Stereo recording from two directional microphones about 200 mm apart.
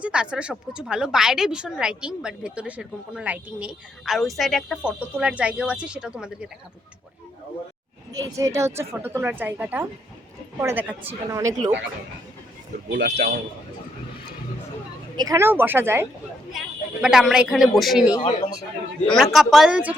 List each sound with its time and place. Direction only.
0.0 s a woman's voice: 5° right (ahead or behind)
8.1 s a woman's voice: 15° right (ahead or behind)
12.9 s speech: 60° right (ahead or behind)
15.1 s a woman's voice: 20° right (ahead or behind); by 18.1 s centre (ahead or behind)
18.1 s speech: 25° left (ahead or behind)
19.0 s a woman's voice: centre (ahead or behind)